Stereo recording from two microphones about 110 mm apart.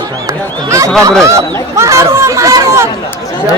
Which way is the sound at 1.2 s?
30° right (ahead or behind).